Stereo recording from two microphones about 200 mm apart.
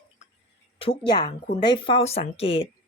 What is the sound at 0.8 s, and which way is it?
Speech, 25° left (ahead or behind).